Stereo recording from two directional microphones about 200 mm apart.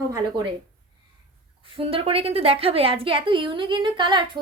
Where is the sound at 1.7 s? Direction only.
25° right (ahead or behind).